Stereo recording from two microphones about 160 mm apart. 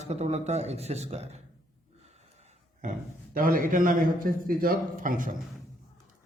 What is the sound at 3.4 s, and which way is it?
A man's voice, 60° right (ahead or behind).